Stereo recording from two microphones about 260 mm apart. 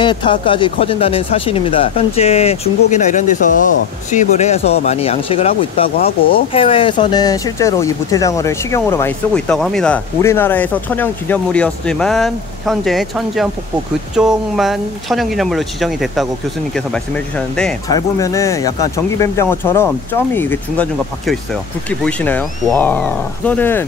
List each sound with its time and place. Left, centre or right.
0.0 s speech: centre